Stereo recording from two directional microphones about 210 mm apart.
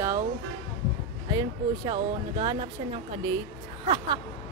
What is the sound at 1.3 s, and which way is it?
Speech, 20° right (ahead or behind).